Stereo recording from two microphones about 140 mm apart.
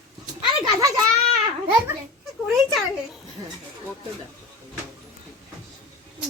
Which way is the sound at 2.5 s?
Centre (ahead or behind).